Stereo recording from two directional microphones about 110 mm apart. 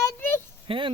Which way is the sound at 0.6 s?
50° right (ahead or behind).